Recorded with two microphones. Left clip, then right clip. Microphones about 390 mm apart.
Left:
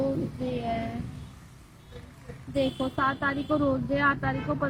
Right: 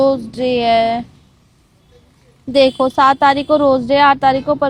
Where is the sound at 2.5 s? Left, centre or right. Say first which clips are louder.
Right 17 dB; right.